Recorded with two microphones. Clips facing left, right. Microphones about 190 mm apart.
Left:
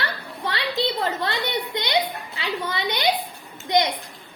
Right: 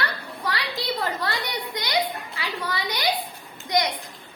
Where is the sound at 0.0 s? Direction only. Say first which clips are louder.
Even; 25° left (ahead or behind).